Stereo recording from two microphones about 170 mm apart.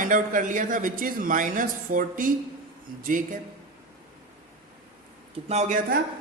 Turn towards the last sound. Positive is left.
turn(degrees=-45)  # may be behind; listen again after turning